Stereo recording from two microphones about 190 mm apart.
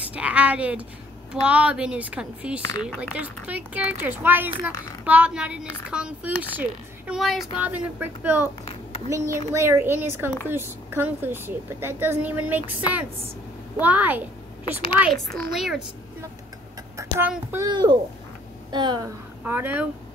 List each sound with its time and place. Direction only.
0.1 s a woman's voice: 5° right (ahead or behind)
15.3 s a woman's voice: centre (ahead or behind)
16.9 s a sound: 15° right (ahead or behind)
17.3 s speech: 10° right (ahead or behind)
17.6 s speech: 25° right (ahead or behind)
19.4 s speech: 10° right (ahead or behind)